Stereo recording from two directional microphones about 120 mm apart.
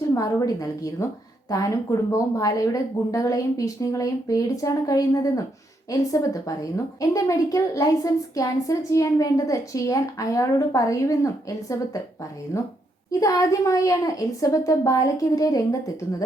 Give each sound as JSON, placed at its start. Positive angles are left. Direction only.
{"t": 0.1, "sound": "a woman's voice", "side_deg": 25}
{"t": 13.1, "sound": "a woman's voice", "side_deg": 30}